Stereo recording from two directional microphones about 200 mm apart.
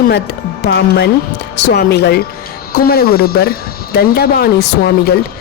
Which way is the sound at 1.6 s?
60° left (ahead or behind).